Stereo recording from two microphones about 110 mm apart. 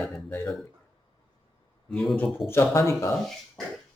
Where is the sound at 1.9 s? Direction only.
Centre (ahead or behind).